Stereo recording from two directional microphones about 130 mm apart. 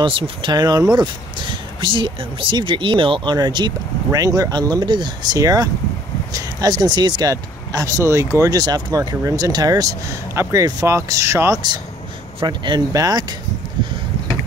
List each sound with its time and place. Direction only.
0.0 s speech: 40° right (ahead or behind)